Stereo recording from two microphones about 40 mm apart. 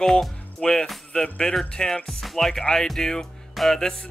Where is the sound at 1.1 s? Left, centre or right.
Left; by 2.5 s centre.